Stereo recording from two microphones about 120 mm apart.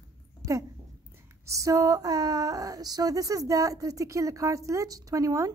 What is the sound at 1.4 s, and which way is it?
A woman's voice, 25° right (ahead or behind).